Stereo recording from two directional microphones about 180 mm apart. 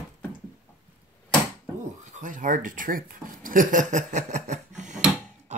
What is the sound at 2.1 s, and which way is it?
Speech, 45° right (ahead or behind).